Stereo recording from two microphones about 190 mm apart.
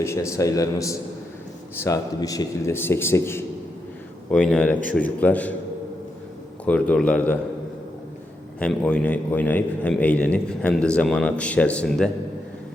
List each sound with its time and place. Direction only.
0.0 s a man's voice: 15° left (ahead or behind)
6.7 s a man's voice: 5° left (ahead or behind)
8.5 s a man's voice: 5° left (ahead or behind)